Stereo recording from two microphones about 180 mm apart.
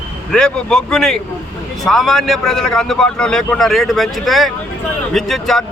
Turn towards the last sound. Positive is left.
turn(degrees=0)  # may be behind; listen again after turning